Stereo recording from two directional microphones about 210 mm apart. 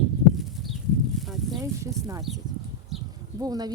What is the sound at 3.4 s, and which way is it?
Speech, 20° right (ahead or behind).